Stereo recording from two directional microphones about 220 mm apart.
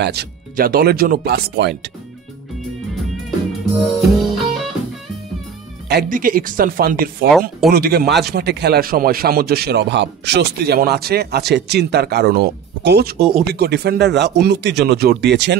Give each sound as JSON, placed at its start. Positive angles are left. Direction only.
{"t": 0.0, "sound": "a man's voice", "side_deg": -45}
{"t": 3.8, "sound": "music", "side_deg": 0}
{"t": 5.9, "sound": "a man's voice", "side_deg": -40}